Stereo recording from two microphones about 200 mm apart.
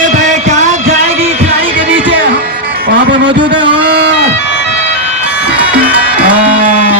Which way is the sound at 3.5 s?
25° right (ahead or behind).